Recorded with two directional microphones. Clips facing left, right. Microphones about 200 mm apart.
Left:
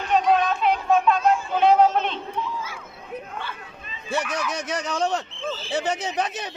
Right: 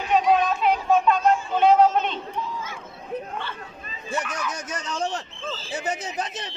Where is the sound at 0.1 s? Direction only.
Centre (ahead or behind).